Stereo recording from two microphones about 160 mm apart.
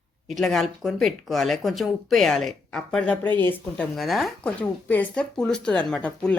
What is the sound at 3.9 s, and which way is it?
Speech, centre (ahead or behind).